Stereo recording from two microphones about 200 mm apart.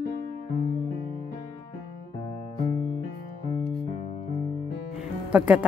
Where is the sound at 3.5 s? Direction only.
25° left (ahead or behind).